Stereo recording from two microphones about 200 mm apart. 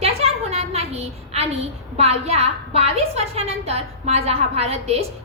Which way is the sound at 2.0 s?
30° right (ahead or behind).